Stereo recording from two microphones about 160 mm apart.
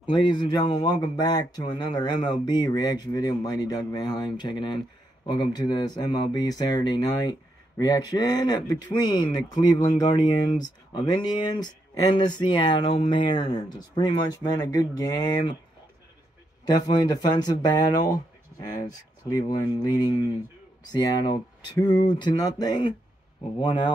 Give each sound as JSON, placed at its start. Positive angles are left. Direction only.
{"t": 0.0, "sound": "a man's voice", "side_deg": 30}
{"t": 17.0, "sound": "a man's voice", "side_deg": 25}